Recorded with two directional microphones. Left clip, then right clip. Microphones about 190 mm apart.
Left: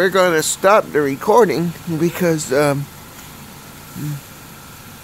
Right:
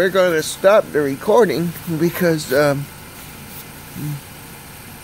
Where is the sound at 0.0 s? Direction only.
25° left (ahead or behind).